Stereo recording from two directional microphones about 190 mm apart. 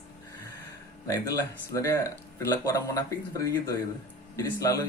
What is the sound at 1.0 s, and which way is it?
Speech, 15° left (ahead or behind).